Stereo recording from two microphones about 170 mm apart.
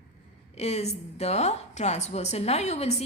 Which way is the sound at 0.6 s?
40° left (ahead or behind).